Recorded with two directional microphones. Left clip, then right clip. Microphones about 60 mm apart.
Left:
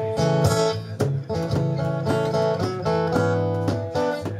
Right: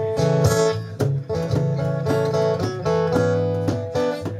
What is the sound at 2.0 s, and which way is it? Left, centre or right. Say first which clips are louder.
Music: right 2 dB; right.